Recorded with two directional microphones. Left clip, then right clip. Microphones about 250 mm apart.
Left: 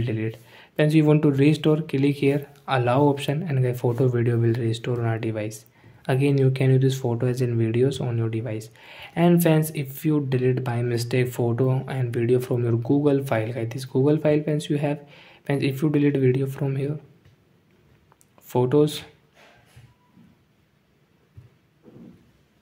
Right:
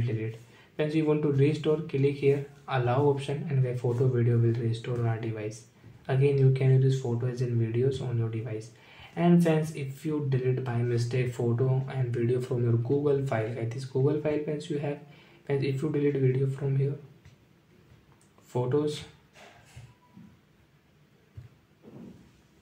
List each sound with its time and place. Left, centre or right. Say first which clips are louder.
0.7 s speech: left 7 dB; left
18.5 s speech: left 8 dB; left